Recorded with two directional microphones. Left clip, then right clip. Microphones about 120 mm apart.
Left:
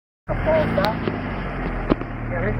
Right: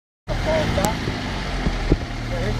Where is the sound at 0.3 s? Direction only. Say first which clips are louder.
Left 2 dB; 40° right (ahead or behind).